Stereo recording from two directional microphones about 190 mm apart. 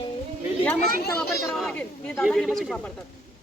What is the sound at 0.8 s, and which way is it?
Speech, 50° right (ahead or behind).